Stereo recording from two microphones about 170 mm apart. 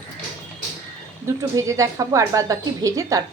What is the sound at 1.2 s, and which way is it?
A woman's voice, 20° right (ahead or behind).